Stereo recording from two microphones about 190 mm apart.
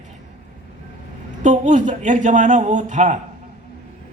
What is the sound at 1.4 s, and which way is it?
Speech, 40° right (ahead or behind).